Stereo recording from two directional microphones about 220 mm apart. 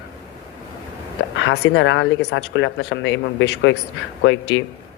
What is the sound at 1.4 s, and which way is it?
Speech, 60° left (ahead or behind).